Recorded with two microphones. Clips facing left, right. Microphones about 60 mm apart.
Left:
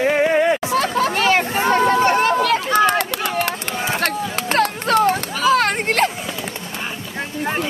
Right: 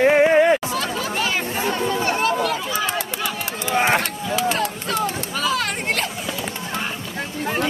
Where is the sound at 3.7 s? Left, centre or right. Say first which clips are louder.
Right 5 dB; right.